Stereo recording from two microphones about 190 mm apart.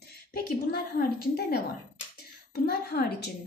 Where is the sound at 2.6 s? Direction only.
55° left (ahead or behind).